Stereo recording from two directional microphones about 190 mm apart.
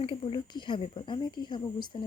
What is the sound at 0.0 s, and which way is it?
Speech, 30° left (ahead or behind).